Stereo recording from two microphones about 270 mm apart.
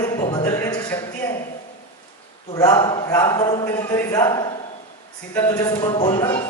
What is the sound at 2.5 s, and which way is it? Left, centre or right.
Speech, centre.